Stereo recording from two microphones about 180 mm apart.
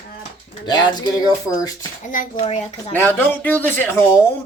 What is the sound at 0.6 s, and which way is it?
Speech, 25° left (ahead or behind).